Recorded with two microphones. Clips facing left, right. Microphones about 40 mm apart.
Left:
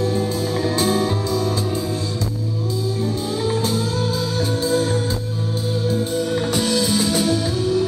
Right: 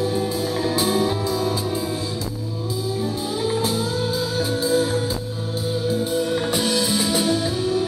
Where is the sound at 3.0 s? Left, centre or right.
Centre.